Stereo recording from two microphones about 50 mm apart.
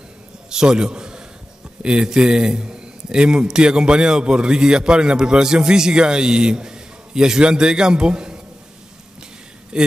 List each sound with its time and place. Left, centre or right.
0.5 s a sound: centre
1.8 s a man's voice: centre
9.7 s a man's voice: centre